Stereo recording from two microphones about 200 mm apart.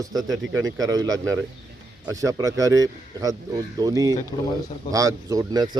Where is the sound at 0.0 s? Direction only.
20° right (ahead or behind).